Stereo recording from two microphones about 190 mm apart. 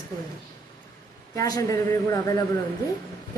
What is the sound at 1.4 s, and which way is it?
A man's voice, 20° left (ahead or behind).